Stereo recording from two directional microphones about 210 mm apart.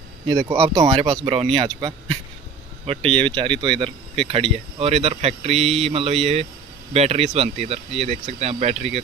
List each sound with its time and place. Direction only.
0.3 s speech: 15° right (ahead or behind)
2.9 s speech: 25° right (ahead or behind)